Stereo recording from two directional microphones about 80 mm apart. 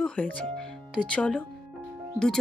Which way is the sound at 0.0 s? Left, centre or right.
Centre.